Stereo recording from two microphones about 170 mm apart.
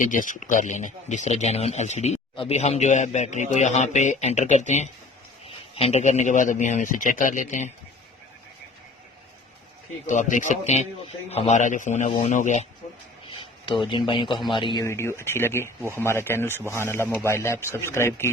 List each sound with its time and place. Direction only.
0.0 s speech: 50° left (ahead or behind)
10.1 s speech: 45° left (ahead or behind)
14.1 s a man's voice: 30° left (ahead or behind)
14.8 s a man's voice: 15° left (ahead or behind)